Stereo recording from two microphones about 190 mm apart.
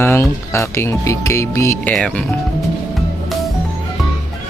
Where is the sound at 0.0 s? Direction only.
15° left (ahead or behind).